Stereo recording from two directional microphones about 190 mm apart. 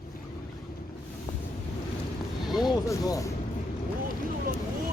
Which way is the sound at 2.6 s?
20° left (ahead or behind).